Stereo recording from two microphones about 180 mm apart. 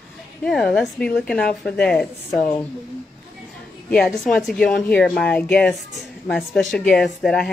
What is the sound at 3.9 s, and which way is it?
A woman's voice, 5° left (ahead or behind).